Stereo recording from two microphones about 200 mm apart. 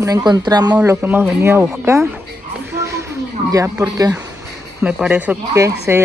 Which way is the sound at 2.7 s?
15° right (ahead or behind).